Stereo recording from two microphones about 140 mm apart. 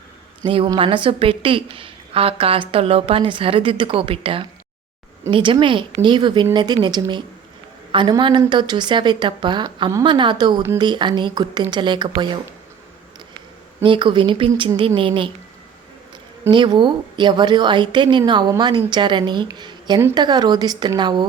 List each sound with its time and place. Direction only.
0.4 s a woman's voice: 35° right (ahead or behind)
13.8 s a woman's voice: 35° right (ahead or behind)
16.5 s a woman's voice: 30° right (ahead or behind)